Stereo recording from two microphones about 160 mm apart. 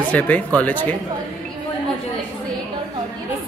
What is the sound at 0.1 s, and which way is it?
Speech, 10° left (ahead or behind).